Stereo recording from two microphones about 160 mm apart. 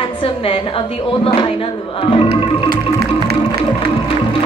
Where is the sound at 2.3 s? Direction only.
85° right.